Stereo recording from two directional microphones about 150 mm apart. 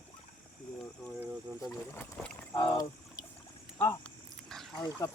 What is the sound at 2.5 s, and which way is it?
Speech, 30° left (ahead or behind).